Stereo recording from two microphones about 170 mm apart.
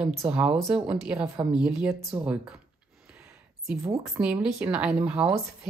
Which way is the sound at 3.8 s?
10° right (ahead or behind).